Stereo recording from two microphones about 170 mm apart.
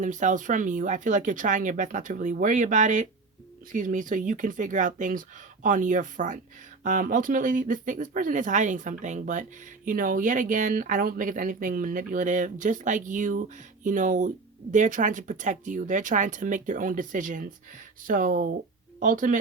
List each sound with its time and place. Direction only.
0.0 s speech: 45° right (ahead or behind)